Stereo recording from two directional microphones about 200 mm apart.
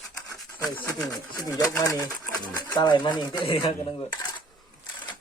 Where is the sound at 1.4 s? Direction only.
15° left (ahead or behind).